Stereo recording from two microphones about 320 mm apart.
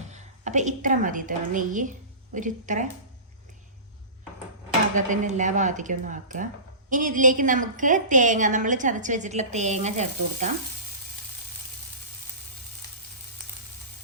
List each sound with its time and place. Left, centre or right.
0.1 s a woman's voice: right
4.9 s a woman's voice: right